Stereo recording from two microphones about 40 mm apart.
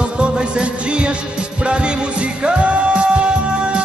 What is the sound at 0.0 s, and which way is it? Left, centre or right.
Music, right.